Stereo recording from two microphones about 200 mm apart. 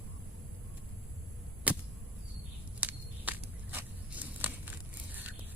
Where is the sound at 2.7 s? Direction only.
10° right (ahead or behind).